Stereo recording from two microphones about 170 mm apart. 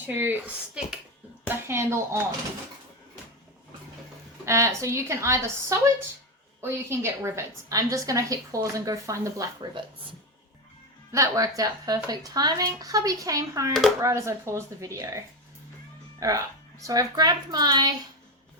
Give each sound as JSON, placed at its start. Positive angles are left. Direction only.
{"t": 0.0, "sound": "a woman's voice", "side_deg": -10}
{"t": 4.4, "sound": "a woman's voice", "side_deg": -15}
{"t": 11.1, "sound": "a woman's voice", "side_deg": -20}
{"t": 16.2, "sound": "a woman's voice", "side_deg": -20}